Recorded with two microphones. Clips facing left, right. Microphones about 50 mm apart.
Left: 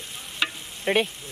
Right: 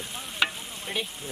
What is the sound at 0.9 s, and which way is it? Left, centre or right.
Speech, left.